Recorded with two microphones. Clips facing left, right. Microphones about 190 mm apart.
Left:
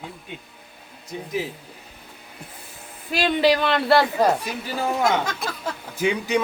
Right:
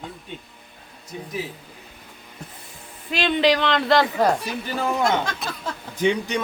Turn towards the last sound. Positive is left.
turn(degrees=5)  # may be behind; listen again after turning